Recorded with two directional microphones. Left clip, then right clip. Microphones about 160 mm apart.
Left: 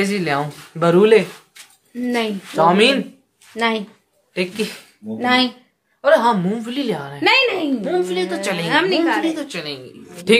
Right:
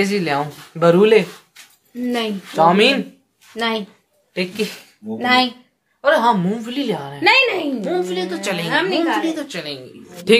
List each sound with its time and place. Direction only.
0.0 s speech: 5° left (ahead or behind)
2.0 s a woman's voice: 30° left (ahead or behind)
2.5 s speech: centre (ahead or behind)
3.5 s a woman's voice: 20° left (ahead or behind)
4.3 s a woman's voice: centre (ahead or behind)
5.9 s speech: 10° right (ahead or behind)
8.1 s a woman's voice: 10° left (ahead or behind)
8.6 s a woman's voice: 60° left (ahead or behind)
9.2 s a woman's voice: 10° left (ahead or behind)